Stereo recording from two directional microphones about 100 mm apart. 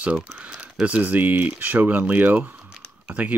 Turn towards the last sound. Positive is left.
turn(degrees=-15)  # may be behind; listen again after turning